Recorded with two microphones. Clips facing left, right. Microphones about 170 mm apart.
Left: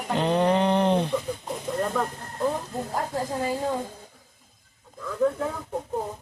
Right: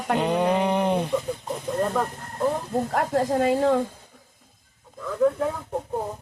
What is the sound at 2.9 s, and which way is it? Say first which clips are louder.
Speech: right 5 dB; 75° right (ahead or behind).